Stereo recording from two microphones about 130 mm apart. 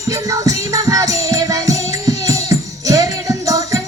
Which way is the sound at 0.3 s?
25° right (ahead or behind).